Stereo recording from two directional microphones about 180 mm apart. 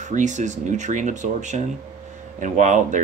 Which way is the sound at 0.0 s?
40° right (ahead or behind).